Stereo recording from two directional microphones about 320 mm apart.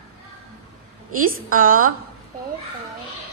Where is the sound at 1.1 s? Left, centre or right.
Right.